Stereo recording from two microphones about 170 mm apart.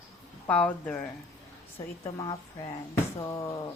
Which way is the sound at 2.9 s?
15° left (ahead or behind).